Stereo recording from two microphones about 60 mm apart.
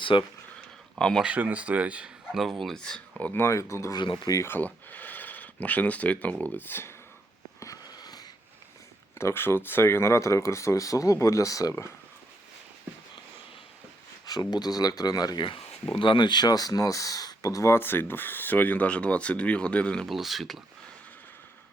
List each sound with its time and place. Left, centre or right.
0.9 s speech: centre
1.2 s speech: right
2.3 s speech: centre
3.3 s speech: left
4.4 s speech: left
7.6 s a sound: left
9.1 s speech: left
14.3 s speech: left
16.5 s speech: left
17.7 s speech: left; by 20.1 s centre
20.1 s speech: centre